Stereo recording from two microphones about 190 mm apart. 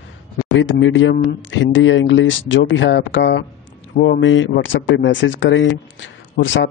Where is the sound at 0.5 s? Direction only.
75° left (ahead or behind).